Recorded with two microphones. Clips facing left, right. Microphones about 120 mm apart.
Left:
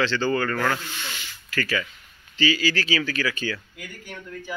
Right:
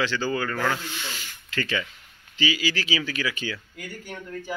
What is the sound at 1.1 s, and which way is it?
Speech, 45° right (ahead or behind).